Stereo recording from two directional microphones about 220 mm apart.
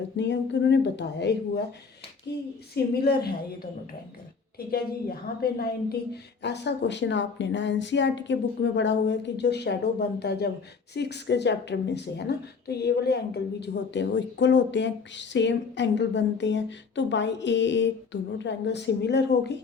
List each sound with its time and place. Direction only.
0.2 s a woman's voice: 50° left (ahead or behind)